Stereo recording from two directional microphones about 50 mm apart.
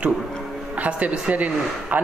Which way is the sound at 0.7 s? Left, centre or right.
Right.